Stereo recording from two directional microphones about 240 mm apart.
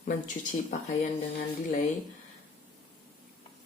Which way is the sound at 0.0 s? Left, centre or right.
Left.